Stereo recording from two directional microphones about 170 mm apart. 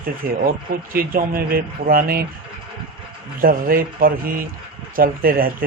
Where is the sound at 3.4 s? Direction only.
55° right (ahead or behind).